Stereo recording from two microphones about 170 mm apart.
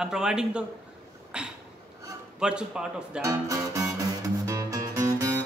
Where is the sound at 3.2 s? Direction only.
20° right (ahead or behind).